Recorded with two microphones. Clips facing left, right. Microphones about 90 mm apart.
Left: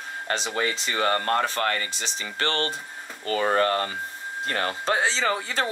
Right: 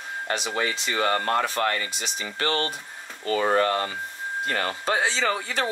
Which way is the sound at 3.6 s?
20° right (ahead or behind).